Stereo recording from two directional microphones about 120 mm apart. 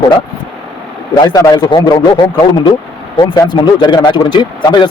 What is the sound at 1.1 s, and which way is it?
Speech, 30° left (ahead or behind).